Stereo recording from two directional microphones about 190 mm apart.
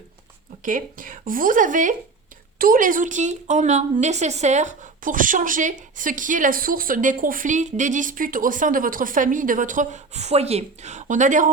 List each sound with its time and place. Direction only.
0.6 s a woman's voice: 45° right (ahead or behind)